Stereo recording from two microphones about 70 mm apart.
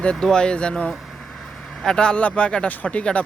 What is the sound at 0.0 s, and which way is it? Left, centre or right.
Speech, centre.